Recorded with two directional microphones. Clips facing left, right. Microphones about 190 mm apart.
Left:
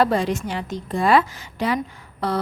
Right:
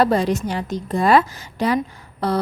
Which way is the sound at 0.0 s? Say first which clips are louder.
Right 2 dB; 40° right (ahead or behind).